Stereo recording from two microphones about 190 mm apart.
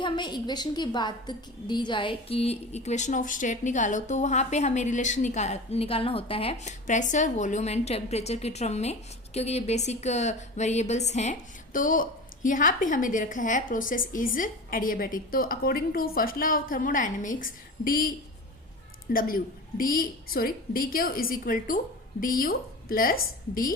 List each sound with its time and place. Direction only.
0.0 s a woman's voice: 25° left (ahead or behind); by 18.1 s 50° left (ahead or behind)
19.1 s a woman's voice: 50° left (ahead or behind)